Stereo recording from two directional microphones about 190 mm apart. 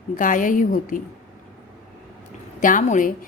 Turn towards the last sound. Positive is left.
turn(degrees=45)  # may be behind; listen again after turning